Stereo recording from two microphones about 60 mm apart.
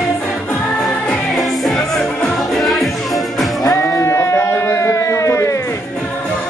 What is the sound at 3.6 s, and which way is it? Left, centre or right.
Music, left.